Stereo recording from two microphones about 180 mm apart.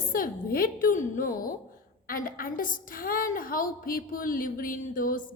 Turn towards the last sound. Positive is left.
turn(degrees=50)  # may be behind; listen again after turning